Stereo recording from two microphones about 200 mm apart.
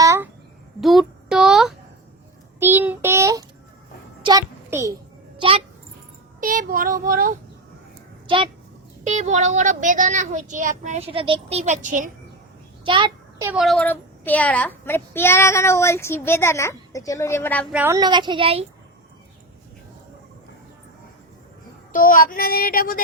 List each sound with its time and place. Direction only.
0.0 s a sound: 15° right (ahead or behind)
0.8 s child singing: centre (ahead or behind)
4.2 s a sound: 20° right (ahead or behind)
6.4 s child singing: 45° right (ahead or behind)
9.0 s speech: 35° right (ahead or behind)
12.8 s child singing: 25° right (ahead or behind)
13.5 s a child's voice: centre (ahead or behind)
17.7 s a woman's voice: 5° right (ahead or behind)
17.9 s a woman's voice: 20° right (ahead or behind)
21.9 s child singing: 45° left (ahead or behind)